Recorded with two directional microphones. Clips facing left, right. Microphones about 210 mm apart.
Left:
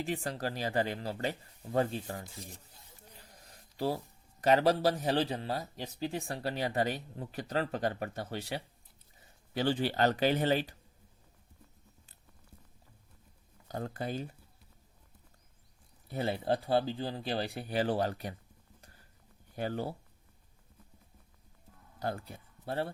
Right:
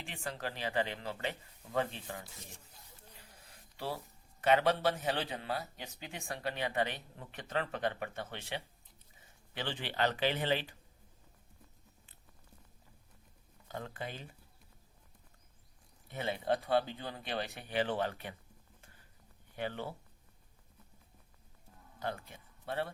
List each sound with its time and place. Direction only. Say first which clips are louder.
0.0 s speech: left 7 dB; 40° left (ahead or behind)
13.7 s speech: left 6 dB; 40° left (ahead or behind)
16.0 s speech: left 3 dB; 35° left (ahead or behind)
19.5 s speech: left 4 dB; 40° left (ahead or behind)
21.9 s speech: left 3 dB; 40° left (ahead or behind)